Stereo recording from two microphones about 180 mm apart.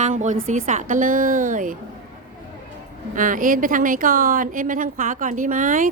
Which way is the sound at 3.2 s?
50° right (ahead or behind).